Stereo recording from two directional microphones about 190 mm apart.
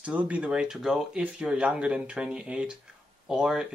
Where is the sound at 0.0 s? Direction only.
5° right (ahead or behind).